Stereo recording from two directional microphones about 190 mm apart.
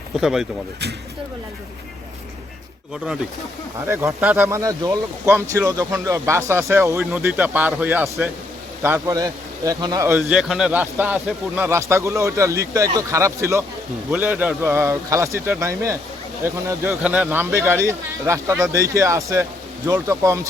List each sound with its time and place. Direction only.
0.2 s speech: centre (ahead or behind)
3.8 s a man's voice: 10° right (ahead or behind)
10.2 s a man's voice: centre (ahead or behind)